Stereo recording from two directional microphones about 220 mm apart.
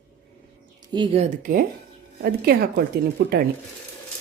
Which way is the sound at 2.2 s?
45° right (ahead or behind).